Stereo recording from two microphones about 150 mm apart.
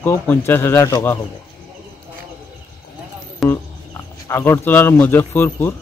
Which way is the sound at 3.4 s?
Centre (ahead or behind).